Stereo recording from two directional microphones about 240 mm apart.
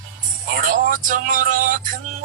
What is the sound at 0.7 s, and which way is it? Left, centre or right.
Music, right.